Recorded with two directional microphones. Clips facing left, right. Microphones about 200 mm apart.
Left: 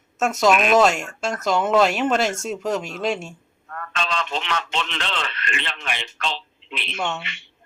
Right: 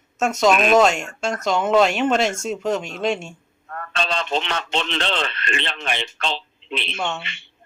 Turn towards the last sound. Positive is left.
turn(degrees=-30)  # may be behind; listen again after turning